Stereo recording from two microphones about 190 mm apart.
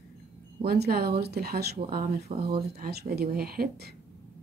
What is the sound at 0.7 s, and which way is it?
Speech, 55° right (ahead or behind).